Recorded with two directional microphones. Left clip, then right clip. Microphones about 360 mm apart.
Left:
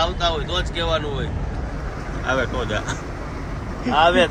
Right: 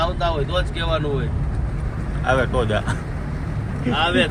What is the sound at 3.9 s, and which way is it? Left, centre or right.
Speech, left.